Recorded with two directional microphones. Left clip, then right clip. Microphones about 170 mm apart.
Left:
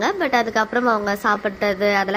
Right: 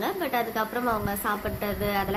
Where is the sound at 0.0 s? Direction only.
25° left (ahead or behind).